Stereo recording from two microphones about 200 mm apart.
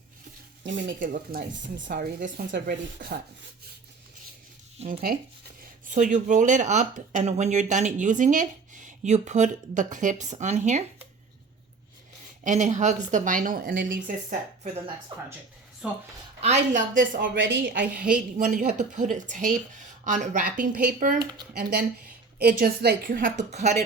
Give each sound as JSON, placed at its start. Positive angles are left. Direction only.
{"t": 0.6, "sound": "stir", "side_deg": -65}
{"t": 0.9, "sound": "a woman's voice", "side_deg": -40}
{"t": 1.9, "sound": "a woman's voice", "side_deg": -45}
{"t": 4.8, "sound": "a woman's voice", "side_deg": -45}
{"t": 12.4, "sound": "speech", "side_deg": -35}
{"t": 15.1, "sound": "speech", "side_deg": -25}
{"t": 15.8, "sound": "a woman's voice", "side_deg": -5}
{"t": 16.4, "sound": "speech", "side_deg": -35}
{"t": 17.3, "sound": "a woman's voice", "side_deg": -65}
{"t": 17.9, "sound": "a woman's voice", "side_deg": -5}
{"t": 18.3, "sound": "speech", "side_deg": -40}
{"t": 21.5, "sound": "a woman's voice", "side_deg": -55}